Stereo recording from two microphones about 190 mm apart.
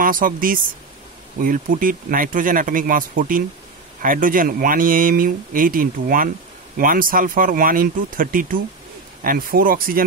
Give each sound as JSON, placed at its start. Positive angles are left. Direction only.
{"t": 0.0, "sound": "speech", "side_deg": -45}